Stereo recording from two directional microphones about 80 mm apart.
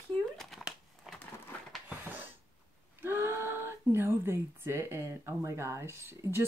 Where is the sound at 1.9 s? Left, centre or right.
Right.